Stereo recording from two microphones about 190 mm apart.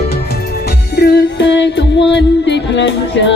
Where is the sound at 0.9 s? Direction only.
60° left (ahead or behind).